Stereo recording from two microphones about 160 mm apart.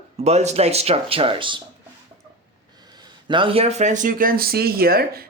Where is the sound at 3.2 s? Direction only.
30° right (ahead or behind).